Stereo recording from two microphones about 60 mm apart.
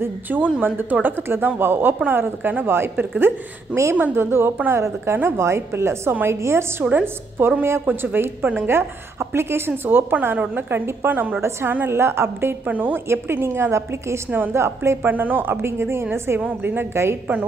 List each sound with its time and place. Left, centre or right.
0.0 s a woman's voice: right
6.8 s a woman's voice: right
10.7 s a woman's voice: right
11.9 s a woman's voice: right
12.6 s a woman's voice: right
13.1 s a woman's voice: right
15.0 s a woman's voice: right
15.6 s a woman's voice: right
16.3 s a woman's voice: right
16.7 s a woman's voice: right